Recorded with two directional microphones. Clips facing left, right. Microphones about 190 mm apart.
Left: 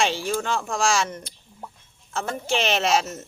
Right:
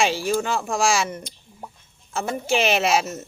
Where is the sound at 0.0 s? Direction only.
10° right (ahead or behind).